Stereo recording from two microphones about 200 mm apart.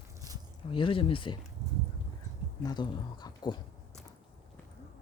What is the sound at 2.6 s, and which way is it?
Speech, 20° left (ahead or behind).